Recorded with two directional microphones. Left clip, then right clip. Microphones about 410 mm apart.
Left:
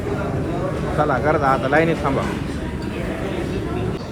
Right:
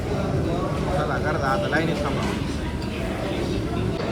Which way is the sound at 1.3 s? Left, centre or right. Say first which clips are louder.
Left 6 dB; centre.